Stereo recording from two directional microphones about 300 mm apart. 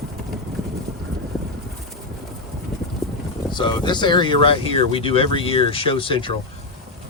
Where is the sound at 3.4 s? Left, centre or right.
Centre.